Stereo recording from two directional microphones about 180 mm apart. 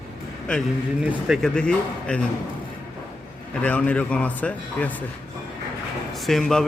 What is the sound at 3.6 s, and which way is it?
A man's voice, 10° left (ahead or behind).